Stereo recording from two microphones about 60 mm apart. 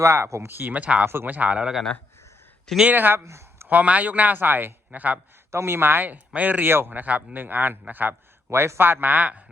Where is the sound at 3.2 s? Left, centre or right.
Right.